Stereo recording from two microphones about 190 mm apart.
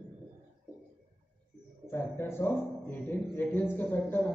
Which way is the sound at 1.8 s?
10° left (ahead or behind).